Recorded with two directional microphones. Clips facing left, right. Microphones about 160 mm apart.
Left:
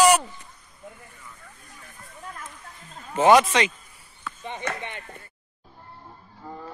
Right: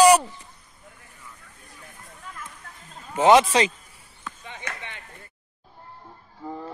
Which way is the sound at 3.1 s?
20° right (ahead or behind).